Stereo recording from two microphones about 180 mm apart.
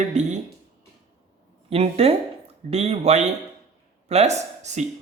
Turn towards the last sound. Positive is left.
turn(degrees=-40)  # may be behind; listen again after turning